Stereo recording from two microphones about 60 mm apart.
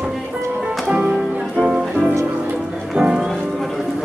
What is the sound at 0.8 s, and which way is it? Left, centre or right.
Music, centre.